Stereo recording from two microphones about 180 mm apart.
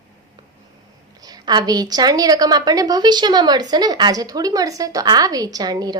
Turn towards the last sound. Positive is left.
turn(degrees=-20)  # may be behind; listen again after turning